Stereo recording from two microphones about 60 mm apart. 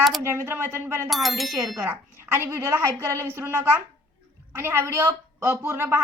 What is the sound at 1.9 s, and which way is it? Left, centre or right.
Speech, right.